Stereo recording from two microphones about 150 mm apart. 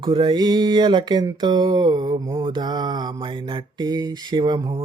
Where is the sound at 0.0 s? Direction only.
30° right (ahead or behind).